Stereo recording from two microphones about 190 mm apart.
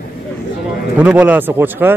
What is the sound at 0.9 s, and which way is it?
Speech, 5° right (ahead or behind).